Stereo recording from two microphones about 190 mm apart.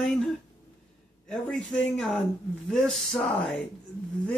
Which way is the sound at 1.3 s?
Centre (ahead or behind).